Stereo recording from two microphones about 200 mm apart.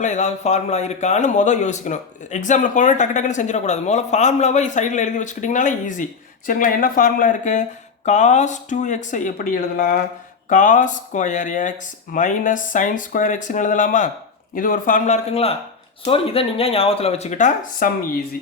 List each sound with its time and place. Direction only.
0.0 s a man's voice: 35° left (ahead or behind)